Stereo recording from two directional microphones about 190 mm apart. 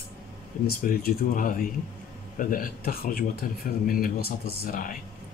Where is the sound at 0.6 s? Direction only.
50° left (ahead or behind).